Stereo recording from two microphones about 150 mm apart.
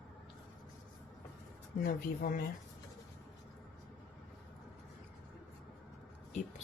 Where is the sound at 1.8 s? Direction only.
75° left (ahead or behind).